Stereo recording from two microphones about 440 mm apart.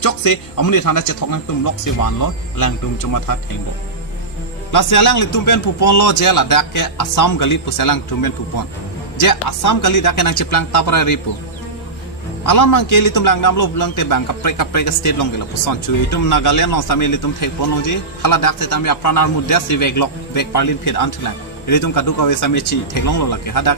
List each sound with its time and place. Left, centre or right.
0.0 s a man's voice: left
4.7 s a man's voice: left
12.5 s a man's voice: left